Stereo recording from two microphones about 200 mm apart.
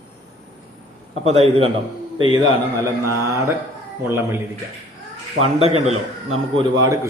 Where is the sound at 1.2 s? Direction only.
30° right (ahead or behind).